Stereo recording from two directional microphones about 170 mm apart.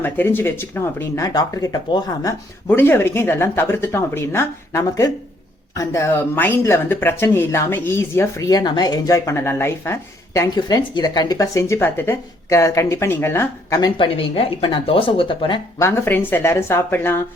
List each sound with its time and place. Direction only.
0.0 s speech: 10° left (ahead or behind)
2.6 s speech: 10° left (ahead or behind)
13.9 s speech: 30° left (ahead or behind)
15.8 s speech: 15° left (ahead or behind)